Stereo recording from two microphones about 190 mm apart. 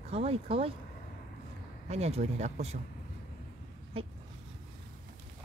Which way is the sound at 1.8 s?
35° right (ahead or behind).